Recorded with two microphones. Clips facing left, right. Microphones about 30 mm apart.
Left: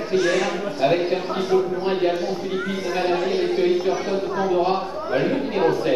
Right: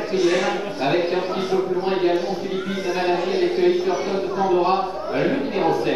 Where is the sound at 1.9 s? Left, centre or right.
Centre.